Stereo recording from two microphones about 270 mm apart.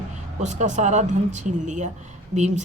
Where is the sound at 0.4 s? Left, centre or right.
Right.